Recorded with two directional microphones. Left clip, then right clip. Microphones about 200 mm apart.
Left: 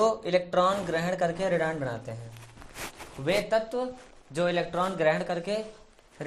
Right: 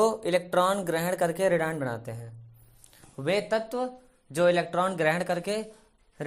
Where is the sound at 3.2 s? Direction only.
40° right (ahead or behind).